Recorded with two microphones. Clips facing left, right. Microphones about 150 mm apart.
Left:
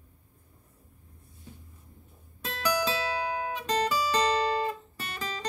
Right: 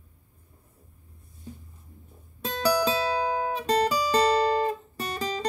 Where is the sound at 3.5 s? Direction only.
35° right (ahead or behind).